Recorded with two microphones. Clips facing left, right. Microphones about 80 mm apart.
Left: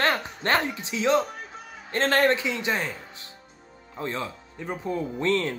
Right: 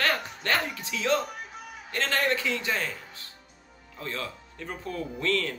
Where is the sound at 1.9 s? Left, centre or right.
Left.